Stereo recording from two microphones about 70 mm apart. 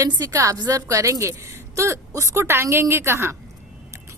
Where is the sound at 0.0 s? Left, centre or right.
Right.